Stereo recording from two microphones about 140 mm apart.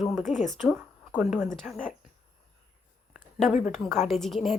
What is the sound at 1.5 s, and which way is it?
Speech, 5° left (ahead or behind).